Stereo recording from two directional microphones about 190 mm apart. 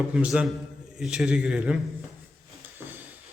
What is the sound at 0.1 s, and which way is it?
A man's voice, 5° right (ahead or behind).